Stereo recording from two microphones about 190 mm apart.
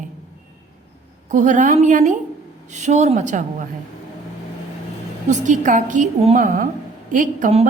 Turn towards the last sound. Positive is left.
turn(degrees=-40)  # may be behind; listen again after turning